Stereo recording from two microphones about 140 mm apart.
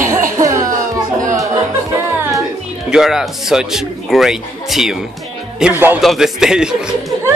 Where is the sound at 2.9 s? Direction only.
5° right (ahead or behind).